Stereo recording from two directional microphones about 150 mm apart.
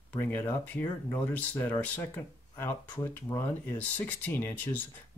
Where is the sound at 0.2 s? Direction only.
15° left (ahead or behind).